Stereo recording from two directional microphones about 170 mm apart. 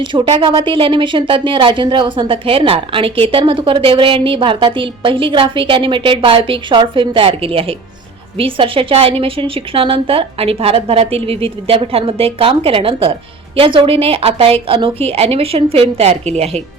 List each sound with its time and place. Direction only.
0.0 s a woman's voice: 30° right (ahead or behind)